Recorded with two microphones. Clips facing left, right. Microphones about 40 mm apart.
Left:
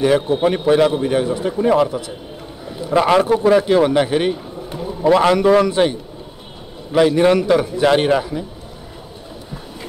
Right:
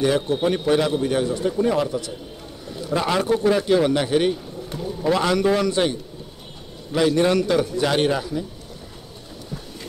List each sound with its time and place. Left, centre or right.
0.0 s a man's voice: centre
2.6 s a sound: left
3.0 s a man's voice: left
3.3 s a man's voice: centre